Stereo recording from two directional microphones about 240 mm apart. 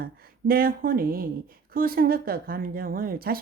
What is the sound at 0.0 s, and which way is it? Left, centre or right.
A woman's voice, right.